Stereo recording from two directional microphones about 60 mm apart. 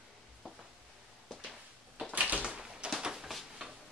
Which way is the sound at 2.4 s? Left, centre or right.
Centre.